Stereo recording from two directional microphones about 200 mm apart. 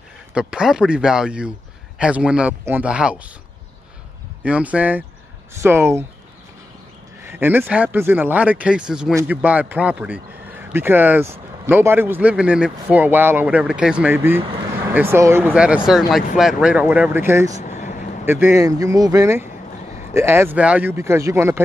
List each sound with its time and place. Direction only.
0.3 s speech: 5° right (ahead or behind)
4.4 s a man's voice: 5° right (ahead or behind)
7.2 s a man's voice: 10° right (ahead or behind)
17.6 s vehicle: 35° left (ahead or behind)
18.2 s a man's voice: 10° right (ahead or behind)